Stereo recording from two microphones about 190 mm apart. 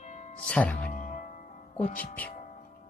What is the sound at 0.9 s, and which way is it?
Music, 40° left (ahead or behind).